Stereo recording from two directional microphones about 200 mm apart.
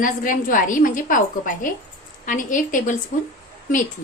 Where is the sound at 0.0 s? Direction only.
40° left (ahead or behind).